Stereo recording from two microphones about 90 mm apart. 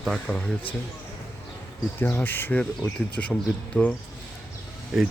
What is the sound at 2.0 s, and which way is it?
Speech, 20° left (ahead or behind).